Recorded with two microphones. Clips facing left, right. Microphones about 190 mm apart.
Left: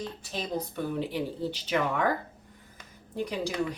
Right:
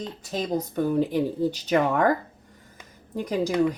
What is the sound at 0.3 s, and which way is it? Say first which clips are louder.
Speech: right 7 dB; 45° right (ahead or behind).